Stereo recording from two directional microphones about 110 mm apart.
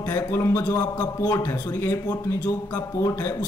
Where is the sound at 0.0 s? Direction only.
25° left (ahead or behind).